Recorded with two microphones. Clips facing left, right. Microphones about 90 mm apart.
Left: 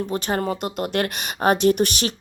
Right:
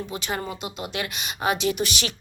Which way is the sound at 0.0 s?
45° left (ahead or behind).